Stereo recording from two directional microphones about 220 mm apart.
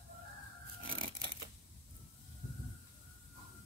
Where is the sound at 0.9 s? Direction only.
25° right (ahead or behind).